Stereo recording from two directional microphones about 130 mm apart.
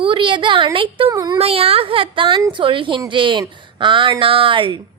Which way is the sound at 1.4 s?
50° right (ahead or behind).